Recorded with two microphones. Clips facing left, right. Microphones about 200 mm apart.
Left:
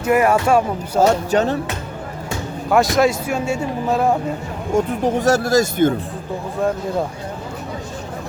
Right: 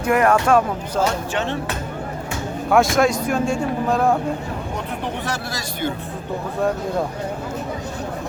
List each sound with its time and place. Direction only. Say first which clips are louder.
0.0 s speech: left 1 dB; 5° left (ahead or behind)
0.9 s speech: left 7 dB; 40° left (ahead or behind)
2.6 s speech: left 1 dB; centre (ahead or behind)
4.7 s speech: left 13 dB; 45° left (ahead or behind)